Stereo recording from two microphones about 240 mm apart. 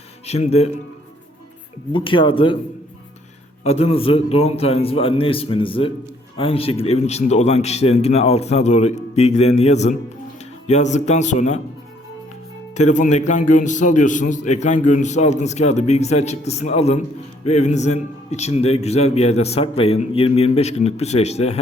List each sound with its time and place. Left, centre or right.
0.3 s a man's voice: left
1.9 s a man's voice: left
3.6 s a man's voice: left
12.7 s a man's voice: left